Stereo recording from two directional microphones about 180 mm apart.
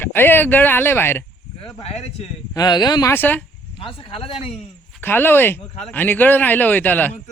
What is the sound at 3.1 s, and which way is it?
Speech, 10° left (ahead or behind).